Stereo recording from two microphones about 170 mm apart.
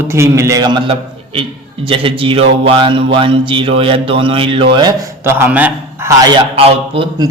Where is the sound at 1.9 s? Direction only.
30° right (ahead or behind).